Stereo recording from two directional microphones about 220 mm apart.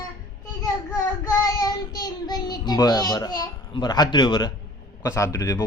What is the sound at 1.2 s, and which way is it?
Child singing, 15° left (ahead or behind).